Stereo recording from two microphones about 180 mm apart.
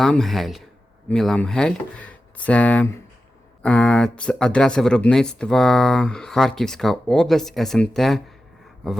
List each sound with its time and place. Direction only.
0.0 s speech: centre (ahead or behind)